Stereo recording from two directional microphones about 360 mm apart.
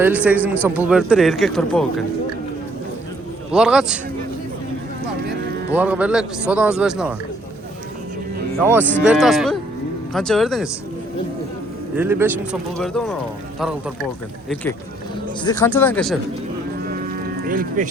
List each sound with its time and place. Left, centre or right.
0.0 s speech: centre
3.5 s speech: centre
5.7 s speech: centre
8.5 s speech: centre
11.9 s speech: centre
17.4 s speech: right